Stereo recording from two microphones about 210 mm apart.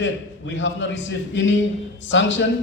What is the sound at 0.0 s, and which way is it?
A man's voice, 60° left (ahead or behind).